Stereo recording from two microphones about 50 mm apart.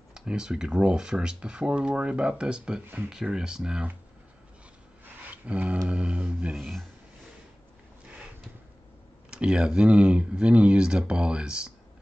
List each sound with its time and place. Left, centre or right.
0.1 s speech: centre
5.0 s speech: right
6.5 s speech: centre
9.3 s speech: centre